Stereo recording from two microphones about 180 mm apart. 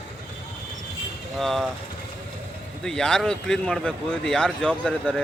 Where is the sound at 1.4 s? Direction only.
Centre (ahead or behind).